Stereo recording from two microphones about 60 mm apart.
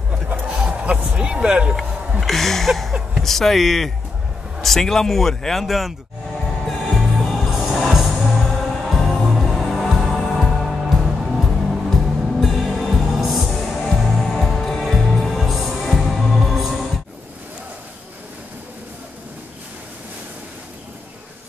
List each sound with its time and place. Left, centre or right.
0.1 s a sound: centre
1.0 s speech: centre
1.8 s speech: centre
7.2 s music: centre